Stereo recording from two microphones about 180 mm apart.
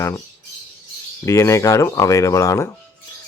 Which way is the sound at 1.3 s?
15° left (ahead or behind).